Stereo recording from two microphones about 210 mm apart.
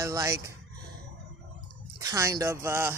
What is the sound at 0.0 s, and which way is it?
Speech, 15° right (ahead or behind).